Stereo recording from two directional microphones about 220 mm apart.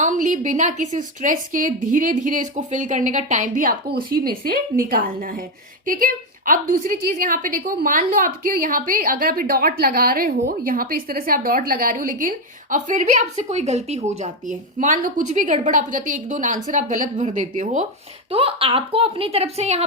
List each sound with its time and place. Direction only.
0.0 s a woman's voice: 35° right (ahead or behind)